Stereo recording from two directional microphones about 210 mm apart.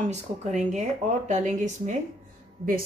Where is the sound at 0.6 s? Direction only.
35° right (ahead or behind).